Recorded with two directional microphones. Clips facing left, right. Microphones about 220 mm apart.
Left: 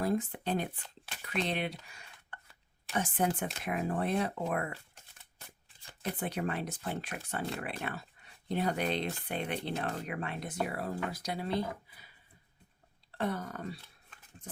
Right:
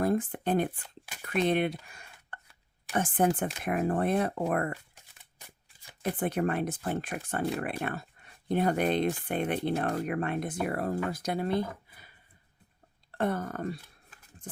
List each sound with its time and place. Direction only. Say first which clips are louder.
0.0 s speech: right 4 dB; 50° right (ahead or behind)
6.0 s speech: right 6 dB; 50° right (ahead or behind)
14.4 s a sound: right 2 dB; 50° right (ahead or behind)